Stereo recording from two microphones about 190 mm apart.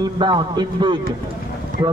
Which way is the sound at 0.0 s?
25° right (ahead or behind).